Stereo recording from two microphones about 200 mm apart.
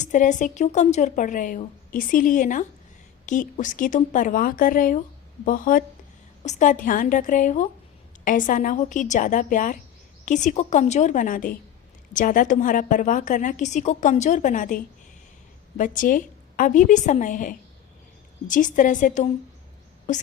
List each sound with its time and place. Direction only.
0.0 s speech: 40° left (ahead or behind)
15.8 s speech: 40° left (ahead or behind)